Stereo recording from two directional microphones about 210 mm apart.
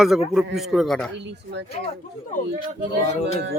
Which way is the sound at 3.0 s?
30° left (ahead or behind).